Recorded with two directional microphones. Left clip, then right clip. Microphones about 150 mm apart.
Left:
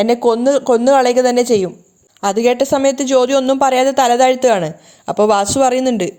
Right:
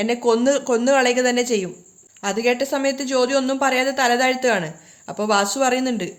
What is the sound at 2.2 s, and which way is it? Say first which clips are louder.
A woman's voice: left 7 dB; 55° left (ahead or behind).